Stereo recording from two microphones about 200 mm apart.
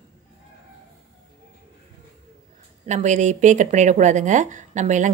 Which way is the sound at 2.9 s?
35° right (ahead or behind).